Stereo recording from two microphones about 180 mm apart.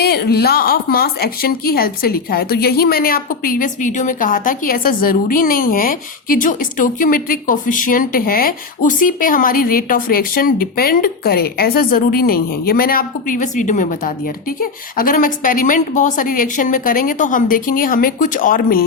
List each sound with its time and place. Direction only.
0.0 s a woman's voice: 60° left (ahead or behind)